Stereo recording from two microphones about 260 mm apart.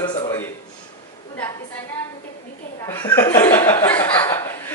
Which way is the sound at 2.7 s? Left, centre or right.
Centre.